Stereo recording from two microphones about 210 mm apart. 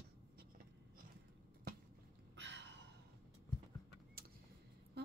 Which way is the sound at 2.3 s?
55° right (ahead or behind).